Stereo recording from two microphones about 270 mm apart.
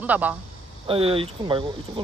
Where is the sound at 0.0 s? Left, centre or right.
Centre.